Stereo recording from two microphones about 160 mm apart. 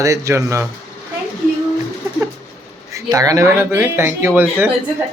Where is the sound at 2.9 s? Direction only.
20° right (ahead or behind).